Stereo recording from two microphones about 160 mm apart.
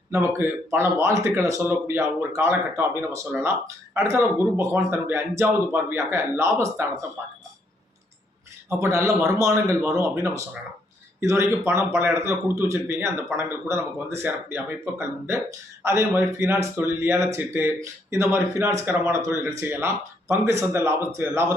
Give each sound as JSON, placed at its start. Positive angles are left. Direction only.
{"t": 0.1, "sound": "speech", "side_deg": -15}
{"t": 8.7, "sound": "speech", "side_deg": -15}